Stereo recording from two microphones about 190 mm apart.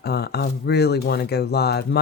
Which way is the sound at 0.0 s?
60° left (ahead or behind).